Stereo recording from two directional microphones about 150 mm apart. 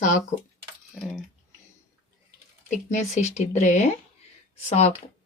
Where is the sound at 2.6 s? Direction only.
50° left (ahead or behind).